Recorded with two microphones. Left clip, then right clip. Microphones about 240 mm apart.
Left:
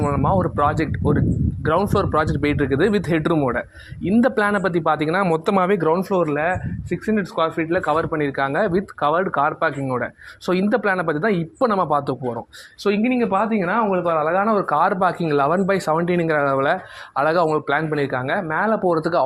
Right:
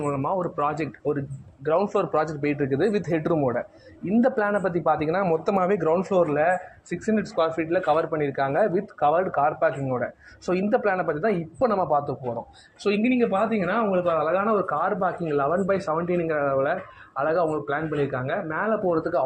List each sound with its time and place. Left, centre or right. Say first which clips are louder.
0.0 s speech: left 6 dB; left